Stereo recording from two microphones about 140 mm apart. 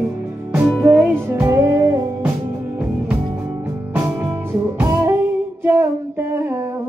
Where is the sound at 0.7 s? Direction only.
10° right (ahead or behind).